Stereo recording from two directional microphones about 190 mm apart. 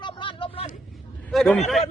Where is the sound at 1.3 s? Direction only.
5° left (ahead or behind).